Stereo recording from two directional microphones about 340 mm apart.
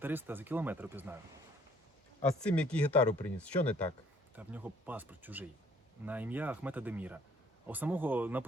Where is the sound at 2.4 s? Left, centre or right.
Centre.